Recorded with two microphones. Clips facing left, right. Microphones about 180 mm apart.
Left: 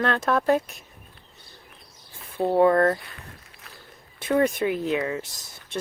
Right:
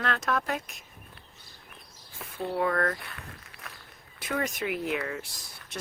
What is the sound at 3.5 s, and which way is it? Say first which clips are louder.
Walk: right 4 dB; 60° right (ahead or behind).